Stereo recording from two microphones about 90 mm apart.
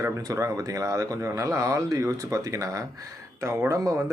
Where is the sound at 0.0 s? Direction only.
35° right (ahead or behind).